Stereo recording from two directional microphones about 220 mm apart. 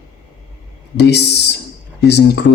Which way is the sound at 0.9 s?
50° left (ahead or behind).